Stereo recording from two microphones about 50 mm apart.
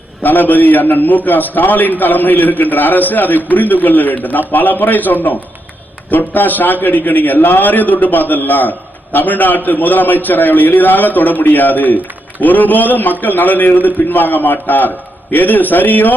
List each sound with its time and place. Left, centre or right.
0.2 s a man's voice: left